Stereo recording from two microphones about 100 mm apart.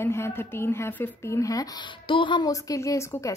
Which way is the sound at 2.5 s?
35° left (ahead or behind).